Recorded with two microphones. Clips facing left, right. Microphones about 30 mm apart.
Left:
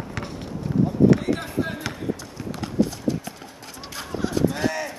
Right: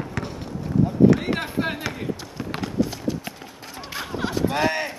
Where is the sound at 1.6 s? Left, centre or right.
Right.